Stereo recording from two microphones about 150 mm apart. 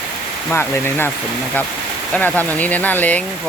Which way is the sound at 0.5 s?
15° left (ahead or behind).